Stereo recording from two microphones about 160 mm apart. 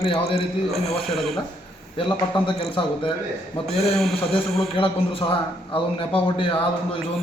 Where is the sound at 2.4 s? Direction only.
35° left (ahead or behind).